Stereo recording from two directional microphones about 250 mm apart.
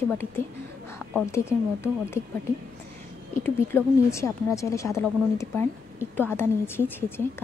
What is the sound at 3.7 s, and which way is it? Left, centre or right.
A woman's voice, centre.